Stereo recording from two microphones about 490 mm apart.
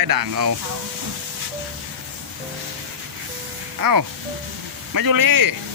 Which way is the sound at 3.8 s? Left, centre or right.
Right.